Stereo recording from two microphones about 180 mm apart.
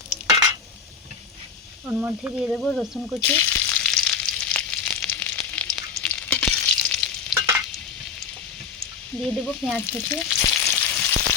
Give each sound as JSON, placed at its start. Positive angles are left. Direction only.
{"t": 1.9, "sound": "speech", "side_deg": -10}
{"t": 3.3, "sound": "frying", "side_deg": 15}
{"t": 7.3, "sound": "stir", "side_deg": -15}
{"t": 9.1, "sound": "frying", "side_deg": 10}